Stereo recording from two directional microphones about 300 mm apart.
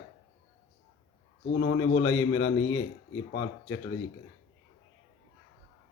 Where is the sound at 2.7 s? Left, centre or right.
Left.